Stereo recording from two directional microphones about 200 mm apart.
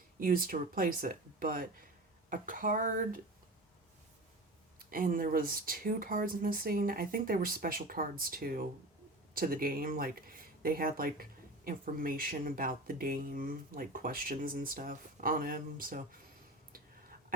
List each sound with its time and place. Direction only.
0.2 s speech: 45° right (ahead or behind)
4.9 s speech: 45° right (ahead or behind)
16.7 s a sound: 45° right (ahead or behind)